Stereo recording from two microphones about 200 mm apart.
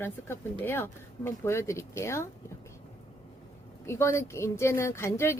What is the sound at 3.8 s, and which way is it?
Speech, 15° left (ahead or behind).